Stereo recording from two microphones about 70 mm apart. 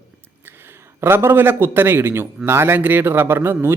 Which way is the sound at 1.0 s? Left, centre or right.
Right.